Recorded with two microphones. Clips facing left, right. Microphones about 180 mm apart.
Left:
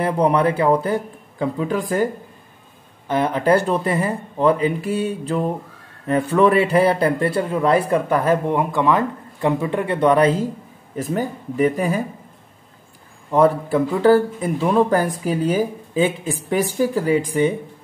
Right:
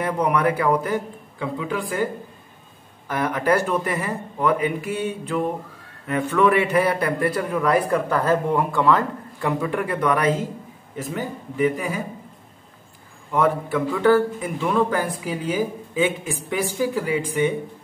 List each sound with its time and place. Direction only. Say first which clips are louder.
0.0 s speech: left 3 dB; 30° left (ahead or behind)
3.1 s a man's voice: left 4 dB; 25° left (ahead or behind)
13.3 s speech: left 5 dB; 35° left (ahead or behind)